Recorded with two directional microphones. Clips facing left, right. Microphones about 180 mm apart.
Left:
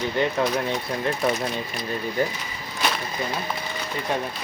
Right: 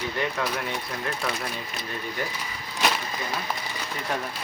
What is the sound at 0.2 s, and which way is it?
Speech, 25° left (ahead or behind).